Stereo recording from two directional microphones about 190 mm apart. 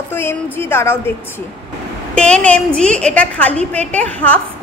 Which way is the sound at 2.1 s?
5° left (ahead or behind).